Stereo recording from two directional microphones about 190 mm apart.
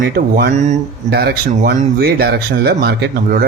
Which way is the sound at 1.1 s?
55° right (ahead or behind).